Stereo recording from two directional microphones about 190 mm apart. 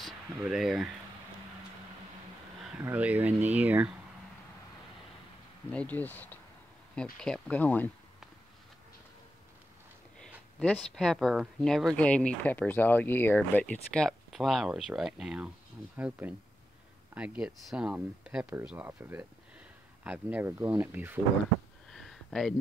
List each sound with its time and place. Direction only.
0.0 s speech: centre (ahead or behind)
2.8 s speech: 10° right (ahead or behind)
5.7 s speech: 5° left (ahead or behind)
10.2 s speech: 5° left (ahead or behind)
21.9 s a sound: centre (ahead or behind)